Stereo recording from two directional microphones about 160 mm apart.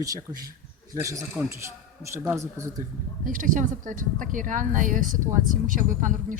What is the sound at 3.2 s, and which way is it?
Speech, 60° right (ahead or behind).